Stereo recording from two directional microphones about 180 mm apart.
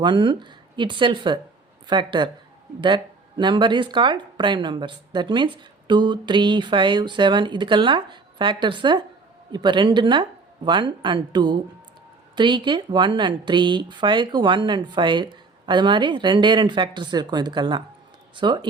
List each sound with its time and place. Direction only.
0.0 s speech: 25° right (ahead or behind)